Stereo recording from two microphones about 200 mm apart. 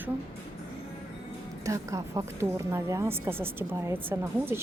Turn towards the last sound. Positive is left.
turn(degrees=-10)  # may be behind; listen again after turning